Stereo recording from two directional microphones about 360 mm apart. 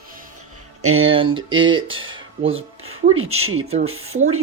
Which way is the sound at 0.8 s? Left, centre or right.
Right.